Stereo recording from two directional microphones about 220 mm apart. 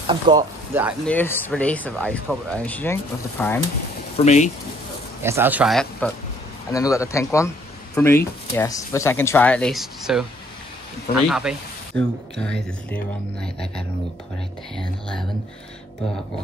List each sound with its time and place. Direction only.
0.0 s speech: 20° right (ahead or behind)
1.0 s speech: 10° left (ahead or behind)
4.2 s speech: 30° left (ahead or behind)
5.2 s speech: 10° right (ahead or behind)
6.7 s speech: 15° left (ahead or behind)
7.3 s a sound: 10° left (ahead or behind)
8.5 s speech: 15° left (ahead or behind)